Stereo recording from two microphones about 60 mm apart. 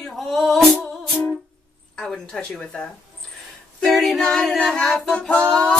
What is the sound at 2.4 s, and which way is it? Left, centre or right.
A capella, centre.